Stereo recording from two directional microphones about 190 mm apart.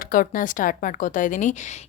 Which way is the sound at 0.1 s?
45° left (ahead or behind).